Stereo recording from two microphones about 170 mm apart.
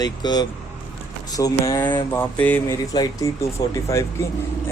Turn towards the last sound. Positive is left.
turn(degrees=15)  # may be behind; listen again after turning